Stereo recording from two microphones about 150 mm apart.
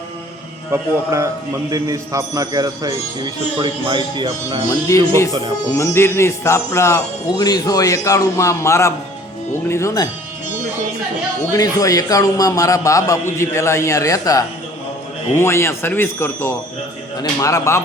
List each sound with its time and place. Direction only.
0.7 s a man's voice: 20° right (ahead or behind)
4.7 s speech: 20° left (ahead or behind)
11.5 s speech: 25° left (ahead or behind)